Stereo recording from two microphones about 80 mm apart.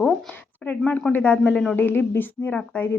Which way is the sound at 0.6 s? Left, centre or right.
Centre.